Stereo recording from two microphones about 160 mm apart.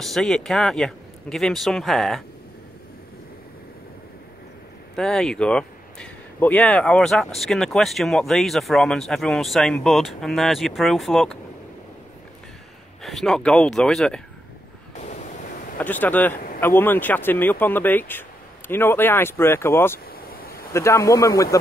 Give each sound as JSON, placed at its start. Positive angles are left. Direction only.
{"t": 0.0, "sound": "speech", "side_deg": 0}
{"t": 4.9, "sound": "speech", "side_deg": 5}
{"t": 13.0, "sound": "speech", "side_deg": 0}
{"t": 15.0, "sound": "a sound", "side_deg": 45}
{"t": 15.8, "sound": "speech", "side_deg": 10}
{"t": 20.1, "sound": "vehicle", "side_deg": 65}
{"t": 20.7, "sound": "speech", "side_deg": 15}